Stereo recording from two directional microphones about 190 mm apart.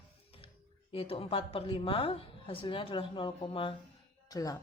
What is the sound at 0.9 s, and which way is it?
A woman's voice, 30° left (ahead or behind).